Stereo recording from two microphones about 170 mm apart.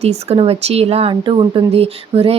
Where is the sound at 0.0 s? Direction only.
40° right (ahead or behind).